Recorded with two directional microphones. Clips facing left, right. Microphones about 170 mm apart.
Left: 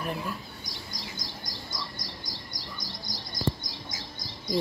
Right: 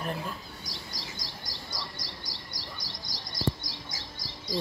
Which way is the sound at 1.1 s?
35° right (ahead or behind).